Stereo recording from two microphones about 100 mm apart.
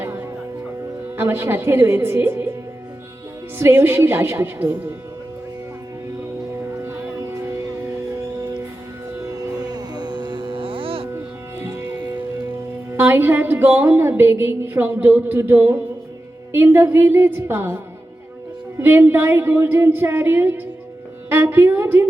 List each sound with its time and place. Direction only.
0.0 s music: 20° right (ahead or behind)
3.6 s music: 25° right (ahead or behind)
6.8 s music: 25° right (ahead or behind); by 11.1 s 65° right (ahead or behind)
11.6 s music: 25° right (ahead or behind)
18.8 s music: 20° right (ahead or behind)
21.2 s a woman's voice: 20° right (ahead or behind)